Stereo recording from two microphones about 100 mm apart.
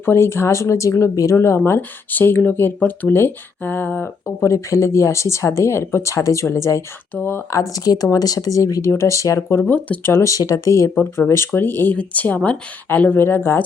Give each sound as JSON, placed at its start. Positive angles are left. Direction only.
{"t": 0.0, "sound": "speech", "side_deg": 25}
{"t": 4.4, "sound": "speech", "side_deg": 30}
{"t": 9.7, "sound": "speech", "side_deg": 15}
{"t": 10.1, "sound": "speech", "side_deg": 30}